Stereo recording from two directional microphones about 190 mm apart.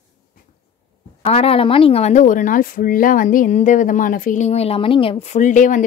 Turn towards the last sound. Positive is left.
turn(degrees=40)  # may be behind; listen again after turning